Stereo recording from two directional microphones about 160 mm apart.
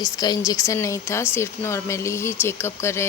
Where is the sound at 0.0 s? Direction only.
25° left (ahead or behind).